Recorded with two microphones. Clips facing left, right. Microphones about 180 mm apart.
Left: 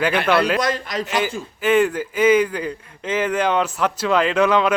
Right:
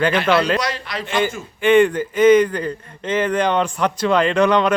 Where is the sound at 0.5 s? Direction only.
50° left (ahead or behind).